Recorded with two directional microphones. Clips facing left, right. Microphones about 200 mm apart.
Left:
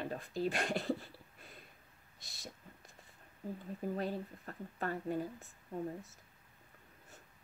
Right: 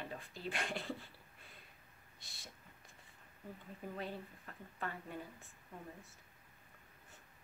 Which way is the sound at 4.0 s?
40° left (ahead or behind).